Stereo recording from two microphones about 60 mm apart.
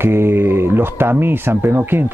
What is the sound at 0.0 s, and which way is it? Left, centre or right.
Mantra, right.